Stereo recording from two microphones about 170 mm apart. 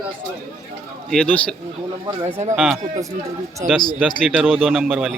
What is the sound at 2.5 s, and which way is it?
Speech, centre (ahead or behind).